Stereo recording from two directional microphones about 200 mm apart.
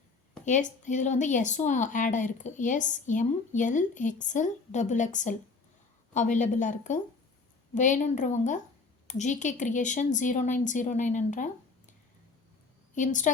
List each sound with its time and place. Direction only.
0.4 s a woman's voice: 40° left (ahead or behind)
12.9 s a woman's voice: 40° left (ahead or behind)